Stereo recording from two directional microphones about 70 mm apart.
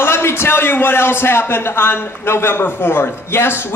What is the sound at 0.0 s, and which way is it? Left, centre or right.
A man's voice, left.